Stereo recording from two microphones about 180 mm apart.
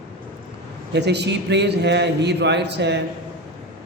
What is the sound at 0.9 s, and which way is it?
Speech, 70° right (ahead or behind).